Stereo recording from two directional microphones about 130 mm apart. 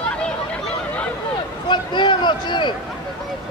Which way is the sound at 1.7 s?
35° left (ahead or behind).